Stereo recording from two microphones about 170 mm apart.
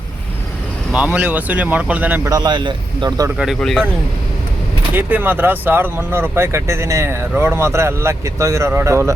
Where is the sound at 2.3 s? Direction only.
25° right (ahead or behind).